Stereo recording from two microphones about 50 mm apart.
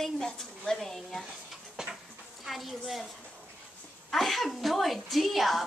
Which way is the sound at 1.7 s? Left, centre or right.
Centre.